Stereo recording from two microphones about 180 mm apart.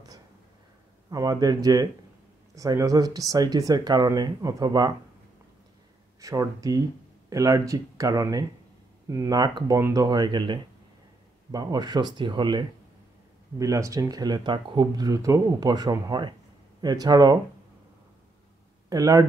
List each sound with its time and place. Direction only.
1.1 s speech: 20° right (ahead or behind)
6.2 s speech: 20° right (ahead or behind)
18.9 s speech: 20° right (ahead or behind)